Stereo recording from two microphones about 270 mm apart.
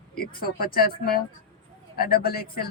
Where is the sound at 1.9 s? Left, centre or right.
Left.